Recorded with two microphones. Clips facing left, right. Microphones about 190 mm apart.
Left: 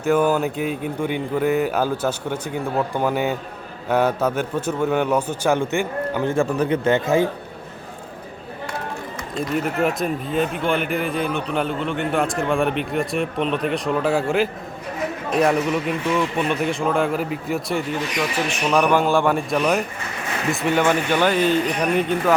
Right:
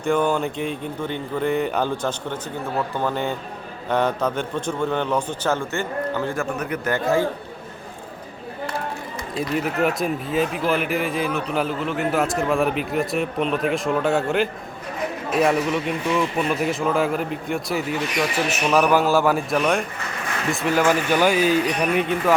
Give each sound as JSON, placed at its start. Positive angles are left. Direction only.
{"t": 0.0, "sound": "speech", "side_deg": 5}
{"t": 6.3, "sound": "speech", "side_deg": 30}
{"t": 9.3, "sound": "speech", "side_deg": -5}